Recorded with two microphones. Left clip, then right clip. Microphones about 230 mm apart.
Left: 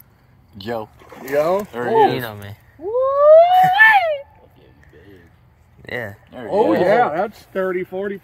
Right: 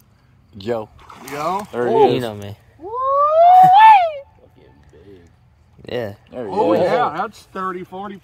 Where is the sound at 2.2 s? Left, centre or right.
Right.